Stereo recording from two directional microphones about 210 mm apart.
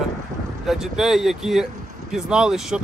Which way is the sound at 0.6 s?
Centre (ahead or behind).